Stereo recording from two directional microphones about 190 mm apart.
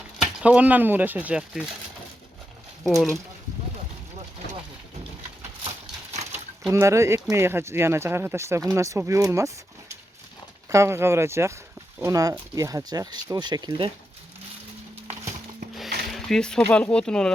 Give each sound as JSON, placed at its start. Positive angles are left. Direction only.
{"t": 0.2, "sound": "speech", "side_deg": -5}
{"t": 2.8, "sound": "speech", "side_deg": 0}
{"t": 6.7, "sound": "speech", "side_deg": -15}
{"t": 10.7, "sound": "speech", "side_deg": -15}
{"t": 16.0, "sound": "a sound", "side_deg": 0}
{"t": 16.6, "sound": "speech", "side_deg": 5}